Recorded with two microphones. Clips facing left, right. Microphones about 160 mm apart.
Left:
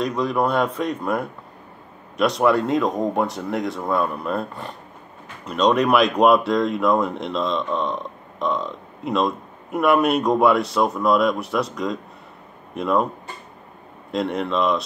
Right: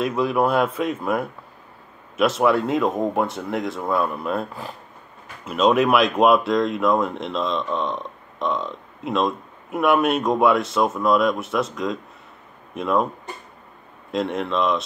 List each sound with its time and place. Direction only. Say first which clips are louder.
0.0 s speech: right 1 dB; 5° right (ahead or behind)
14.1 s speech: left 1 dB; centre (ahead or behind)